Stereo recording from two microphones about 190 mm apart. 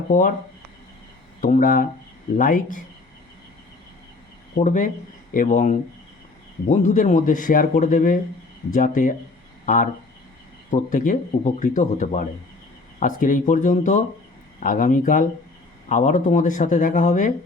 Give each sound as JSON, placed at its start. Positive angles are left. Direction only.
{"t": 0.1, "sound": "speech", "side_deg": 45}
{"t": 1.4, "sound": "speech", "side_deg": 45}
{"t": 4.5, "sound": "speech", "side_deg": 40}